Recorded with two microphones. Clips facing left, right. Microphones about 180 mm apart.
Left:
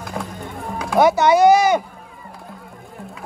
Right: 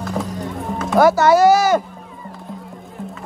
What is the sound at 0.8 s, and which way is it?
Speech, centre (ahead or behind).